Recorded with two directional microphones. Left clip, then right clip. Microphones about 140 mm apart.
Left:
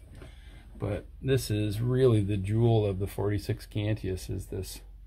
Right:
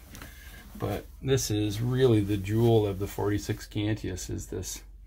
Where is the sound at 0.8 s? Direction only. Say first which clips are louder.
Right 1 dB; 30° left (ahead or behind).